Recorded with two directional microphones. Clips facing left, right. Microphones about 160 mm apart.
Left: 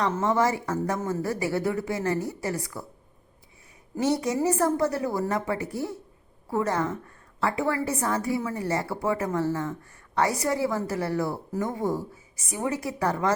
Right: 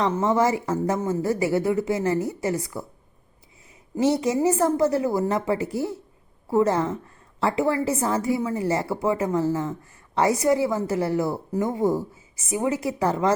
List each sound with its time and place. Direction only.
0.0 s a woman's voice: 20° right (ahead or behind)
3.9 s a woman's voice: 20° right (ahead or behind)